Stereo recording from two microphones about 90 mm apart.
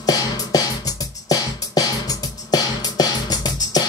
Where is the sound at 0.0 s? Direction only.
45° left (ahead or behind).